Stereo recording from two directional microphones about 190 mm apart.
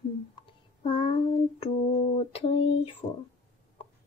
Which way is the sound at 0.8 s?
30° left (ahead or behind).